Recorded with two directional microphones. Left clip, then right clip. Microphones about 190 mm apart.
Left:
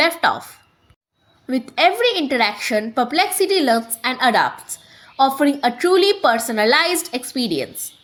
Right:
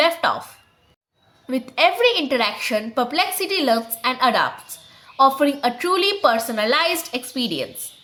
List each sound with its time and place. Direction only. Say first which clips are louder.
0.0 s a woman's voice: left 1 dB; 15° left (ahead or behind)
1.5 s a woman's voice: left 2 dB; 15° left (ahead or behind)